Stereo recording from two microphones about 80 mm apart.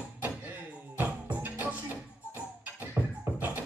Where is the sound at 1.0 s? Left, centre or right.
Right.